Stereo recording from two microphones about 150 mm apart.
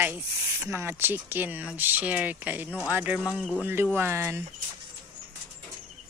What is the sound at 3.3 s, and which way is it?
Speech, 5° left (ahead or behind).